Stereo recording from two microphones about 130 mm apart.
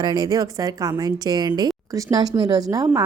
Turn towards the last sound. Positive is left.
turn(degrees=-25)  # may be behind; listen again after turning